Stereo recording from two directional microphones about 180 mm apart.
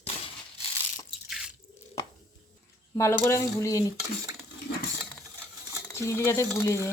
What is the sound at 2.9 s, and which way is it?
Speech, 15° left (ahead or behind).